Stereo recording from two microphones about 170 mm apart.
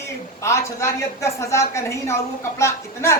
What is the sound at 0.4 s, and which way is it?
A woman's voice, 15° left (ahead or behind).